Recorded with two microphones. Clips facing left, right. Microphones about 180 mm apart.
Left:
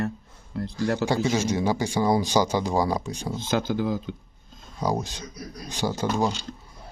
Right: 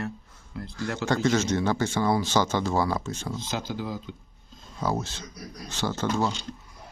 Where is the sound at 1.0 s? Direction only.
10° left (ahead or behind).